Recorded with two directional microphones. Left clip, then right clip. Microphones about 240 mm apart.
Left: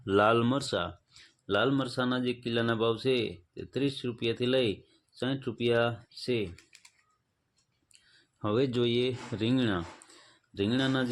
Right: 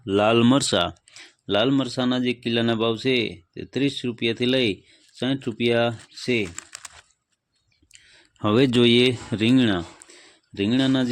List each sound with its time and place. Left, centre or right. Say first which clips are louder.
0.0 s speech: right 6 dB; right
7.9 s speech: right 11 dB; right